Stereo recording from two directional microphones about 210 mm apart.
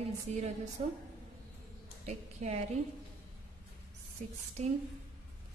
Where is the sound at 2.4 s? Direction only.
35° right (ahead or behind).